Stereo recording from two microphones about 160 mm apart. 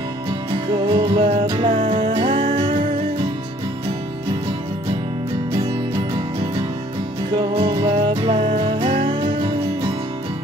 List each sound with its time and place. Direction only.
0.8 s music: 35° right (ahead or behind)
7.6 s music: 35° right (ahead or behind)